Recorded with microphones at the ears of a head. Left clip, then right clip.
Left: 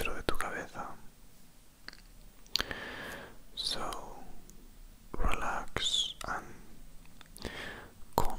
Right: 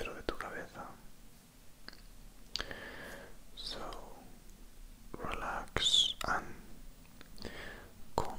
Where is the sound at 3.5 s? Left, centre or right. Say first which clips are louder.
Left 8 dB; left.